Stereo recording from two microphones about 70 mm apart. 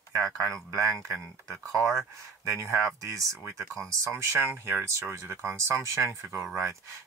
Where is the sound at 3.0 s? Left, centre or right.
Right.